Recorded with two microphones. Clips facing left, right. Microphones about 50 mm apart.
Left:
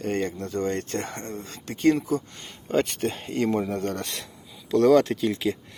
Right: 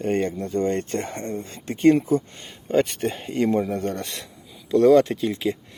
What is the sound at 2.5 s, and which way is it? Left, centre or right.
Speech, centre.